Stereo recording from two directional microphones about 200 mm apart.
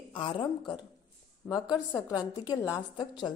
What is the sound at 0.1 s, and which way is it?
A woman's voice, 25° left (ahead or behind).